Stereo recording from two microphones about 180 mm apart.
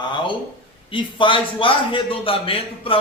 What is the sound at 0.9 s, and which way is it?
A man's voice, 30° left (ahead or behind).